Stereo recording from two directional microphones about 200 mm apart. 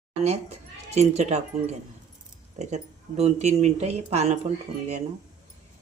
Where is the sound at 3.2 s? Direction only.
30° right (ahead or behind).